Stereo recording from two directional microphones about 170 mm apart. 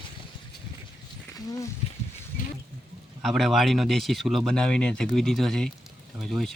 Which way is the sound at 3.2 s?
Centre (ahead or behind).